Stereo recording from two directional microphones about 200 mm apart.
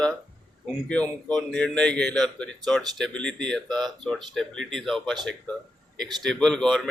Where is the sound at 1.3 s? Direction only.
5° left (ahead or behind).